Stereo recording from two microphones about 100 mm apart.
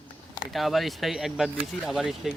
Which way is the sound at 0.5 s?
Centre (ahead or behind).